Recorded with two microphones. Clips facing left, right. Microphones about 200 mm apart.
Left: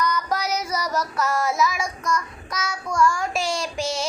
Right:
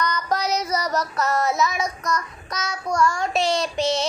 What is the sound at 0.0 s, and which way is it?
Music, 5° left (ahead or behind).